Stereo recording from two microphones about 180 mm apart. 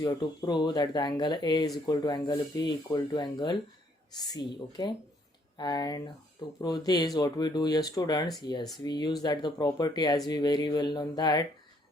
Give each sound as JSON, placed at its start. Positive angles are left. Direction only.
{"t": 0.0, "sound": "speech", "side_deg": 20}